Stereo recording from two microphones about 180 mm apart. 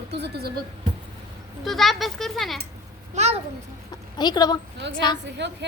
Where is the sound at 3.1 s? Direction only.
40° right (ahead or behind).